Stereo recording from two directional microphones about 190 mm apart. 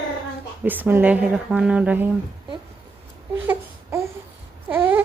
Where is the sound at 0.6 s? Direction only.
10° right (ahead or behind).